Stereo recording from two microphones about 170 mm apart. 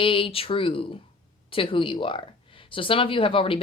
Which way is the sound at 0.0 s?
30° left (ahead or behind).